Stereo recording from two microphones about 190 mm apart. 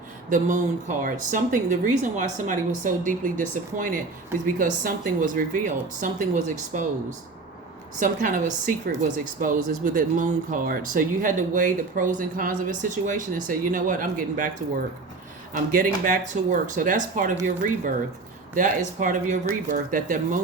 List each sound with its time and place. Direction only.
0.3 s speech: 40° right (ahead or behind)
7.9 s speech: 45° right (ahead or behind)
9.4 s speech: 45° right (ahead or behind)